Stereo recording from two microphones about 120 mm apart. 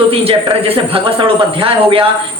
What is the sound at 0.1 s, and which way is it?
A man's voice, 50° right (ahead or behind).